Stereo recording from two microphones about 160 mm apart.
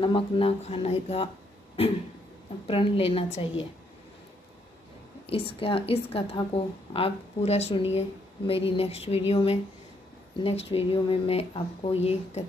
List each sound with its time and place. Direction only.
0.0 s a woman's voice: 35° left (ahead or behind)
2.6 s a woman's voice: 35° left (ahead or behind)
5.2 s a woman's voice: 35° left (ahead or behind)